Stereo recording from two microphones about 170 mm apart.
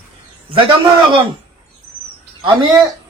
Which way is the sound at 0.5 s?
30° right (ahead or behind).